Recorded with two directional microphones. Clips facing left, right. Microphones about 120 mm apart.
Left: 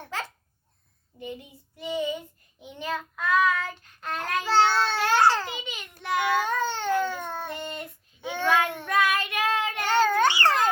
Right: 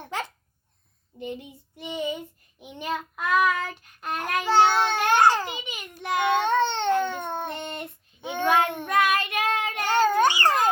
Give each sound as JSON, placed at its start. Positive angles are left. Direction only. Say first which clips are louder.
{"t": 1.8, "sound": "child singing", "louder": "left 1 dB", "side_deg": -20}
{"t": 4.0, "sound": "babbling", "louder": "right 2 dB", "side_deg": -15}